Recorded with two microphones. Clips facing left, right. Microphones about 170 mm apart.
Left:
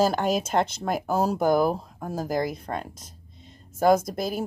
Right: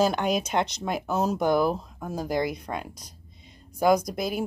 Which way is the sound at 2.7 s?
Centre (ahead or behind).